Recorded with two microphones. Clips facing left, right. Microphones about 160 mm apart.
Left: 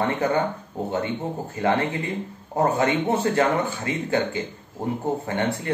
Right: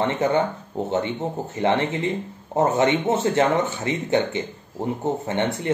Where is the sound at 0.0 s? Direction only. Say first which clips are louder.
Right 2 dB; 25° right (ahead or behind).